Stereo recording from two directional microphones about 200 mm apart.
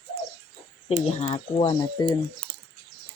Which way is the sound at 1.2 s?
30° left (ahead or behind).